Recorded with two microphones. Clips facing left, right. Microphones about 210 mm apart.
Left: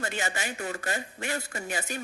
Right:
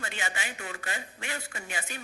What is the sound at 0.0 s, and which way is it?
A woman's voice, 40° left (ahead or behind).